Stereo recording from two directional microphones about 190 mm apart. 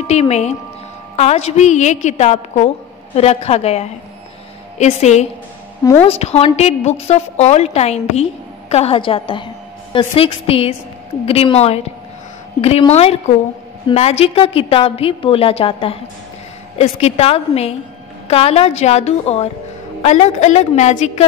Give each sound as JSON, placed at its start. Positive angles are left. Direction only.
{"t": 0.0, "sound": "a woman's voice", "side_deg": 35}